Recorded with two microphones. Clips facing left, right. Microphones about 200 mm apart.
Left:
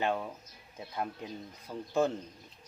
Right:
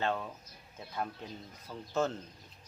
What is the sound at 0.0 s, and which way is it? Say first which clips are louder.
Speech: left 2 dB; 15° left (ahead or behind).